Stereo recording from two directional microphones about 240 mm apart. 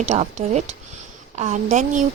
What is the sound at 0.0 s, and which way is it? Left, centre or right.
Speech, right.